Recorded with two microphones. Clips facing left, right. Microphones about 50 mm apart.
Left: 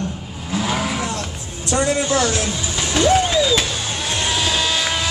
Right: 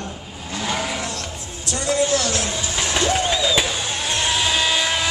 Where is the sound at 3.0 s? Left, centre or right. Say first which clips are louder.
Left 6 dB; centre.